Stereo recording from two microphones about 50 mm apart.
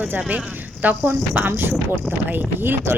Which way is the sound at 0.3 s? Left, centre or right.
Right.